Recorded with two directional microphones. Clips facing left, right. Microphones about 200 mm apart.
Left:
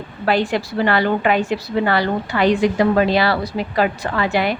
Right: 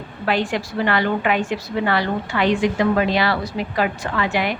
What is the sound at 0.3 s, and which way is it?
A woman's voice, 35° left (ahead or behind).